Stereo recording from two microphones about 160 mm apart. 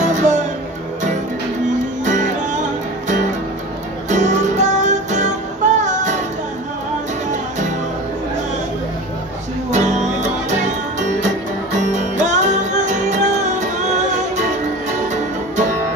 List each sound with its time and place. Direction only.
0.0 s music: 50° right (ahead or behind)
2.0 s music: 50° right (ahead or behind)
4.1 s music: 45° right (ahead or behind)
7.2 s music: 50° right (ahead or behind)
9.7 s music: 45° right (ahead or behind)
11.9 s music: 50° right (ahead or behind)